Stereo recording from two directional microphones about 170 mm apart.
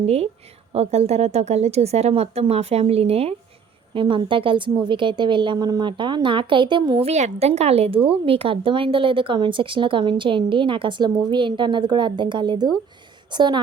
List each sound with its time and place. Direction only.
0.0 s a woman's voice: 35° right (ahead or behind)